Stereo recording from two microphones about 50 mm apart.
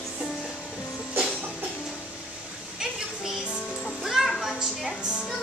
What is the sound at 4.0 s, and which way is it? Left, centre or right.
Music, centre.